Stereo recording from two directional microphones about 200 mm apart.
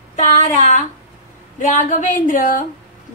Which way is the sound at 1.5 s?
40° left (ahead or behind).